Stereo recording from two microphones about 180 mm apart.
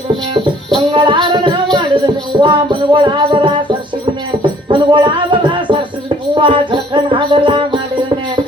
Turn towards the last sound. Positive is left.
turn(degrees=-25)  # may be behind; listen again after turning